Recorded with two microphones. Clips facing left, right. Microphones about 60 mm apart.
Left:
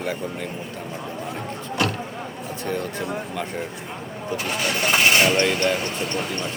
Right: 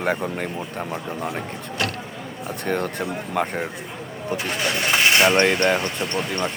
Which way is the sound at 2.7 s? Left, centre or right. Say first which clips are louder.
Right 2 dB; right.